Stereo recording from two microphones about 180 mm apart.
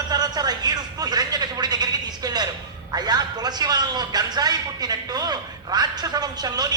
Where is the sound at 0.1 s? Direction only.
20° right (ahead or behind).